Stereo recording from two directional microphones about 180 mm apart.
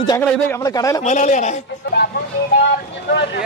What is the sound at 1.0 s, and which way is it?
Speech, 40° left (ahead or behind).